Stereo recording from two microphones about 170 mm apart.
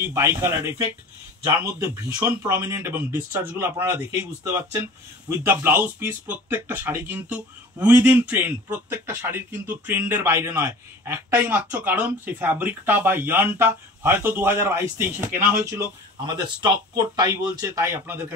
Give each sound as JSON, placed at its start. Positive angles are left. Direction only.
{"t": 0.0, "sound": "speech", "side_deg": -15}
{"t": 16.3, "sound": "speech", "side_deg": -25}